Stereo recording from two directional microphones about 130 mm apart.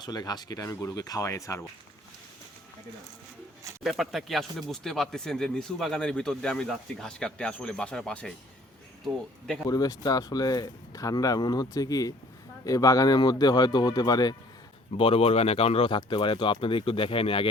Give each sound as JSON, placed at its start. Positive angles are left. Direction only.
{"t": 0.0, "sound": "speech", "side_deg": 30}
{"t": 3.8, "sound": "speech", "side_deg": 0}
{"t": 9.6, "sound": "speech", "side_deg": 30}
{"t": 14.9, "sound": "speech", "side_deg": 45}